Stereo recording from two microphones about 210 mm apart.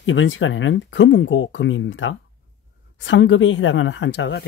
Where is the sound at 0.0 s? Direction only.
65° left (ahead or behind).